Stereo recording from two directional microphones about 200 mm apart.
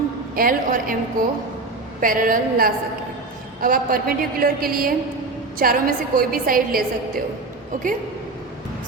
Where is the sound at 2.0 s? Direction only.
45° right (ahead or behind).